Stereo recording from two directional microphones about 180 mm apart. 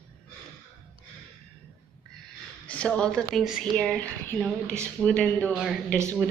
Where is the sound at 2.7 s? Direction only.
5° left (ahead or behind).